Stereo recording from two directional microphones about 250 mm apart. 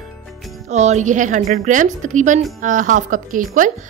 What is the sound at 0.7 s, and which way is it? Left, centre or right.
A woman's voice, right.